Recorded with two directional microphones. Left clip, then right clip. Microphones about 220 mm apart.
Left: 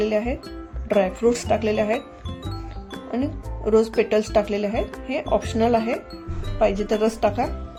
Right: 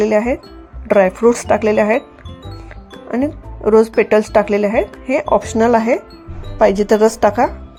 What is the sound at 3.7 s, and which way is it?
Speech, 25° right (ahead or behind).